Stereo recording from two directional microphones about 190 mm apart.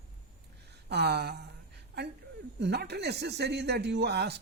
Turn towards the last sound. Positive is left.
turn(degrees=-60)  # may be behind; listen again after turning